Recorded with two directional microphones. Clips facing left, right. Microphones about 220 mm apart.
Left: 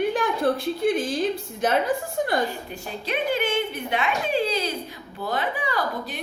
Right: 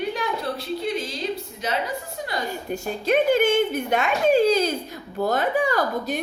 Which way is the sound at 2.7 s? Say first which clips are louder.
Right 8 dB; 45° right (ahead or behind).